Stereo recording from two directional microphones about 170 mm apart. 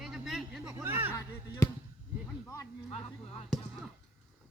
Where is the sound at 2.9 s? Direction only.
35° left (ahead or behind).